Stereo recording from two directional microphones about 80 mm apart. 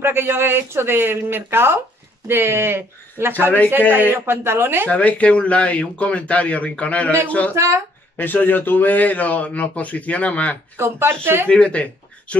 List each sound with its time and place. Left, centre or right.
0.0 s speech: right
4.8 s a man's voice: centre
7.5 s speech: right
8.2 s a man's voice: left
10.8 s speech: right
11.4 s speech: centre